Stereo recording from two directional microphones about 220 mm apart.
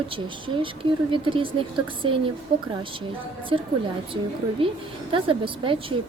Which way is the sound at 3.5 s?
25° right (ahead or behind).